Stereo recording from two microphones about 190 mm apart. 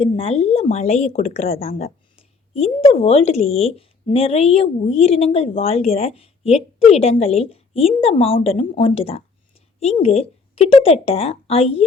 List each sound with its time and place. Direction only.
0.0 s speech: 30° left (ahead or behind)